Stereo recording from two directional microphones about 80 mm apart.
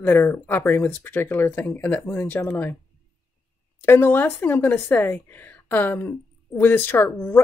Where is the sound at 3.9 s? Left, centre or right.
Left.